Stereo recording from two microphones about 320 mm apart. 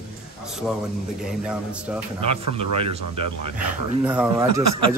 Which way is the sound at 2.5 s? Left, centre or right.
Centre.